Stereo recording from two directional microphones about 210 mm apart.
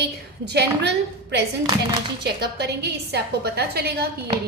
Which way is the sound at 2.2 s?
50° right (ahead or behind).